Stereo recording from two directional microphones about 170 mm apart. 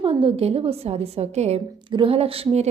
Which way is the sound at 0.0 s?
30° right (ahead or behind).